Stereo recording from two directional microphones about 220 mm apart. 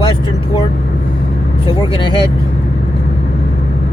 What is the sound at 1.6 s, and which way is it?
Speech, 20° left (ahead or behind).